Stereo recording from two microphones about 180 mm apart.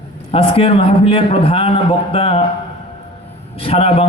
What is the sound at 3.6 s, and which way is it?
Speech, 30° left (ahead or behind).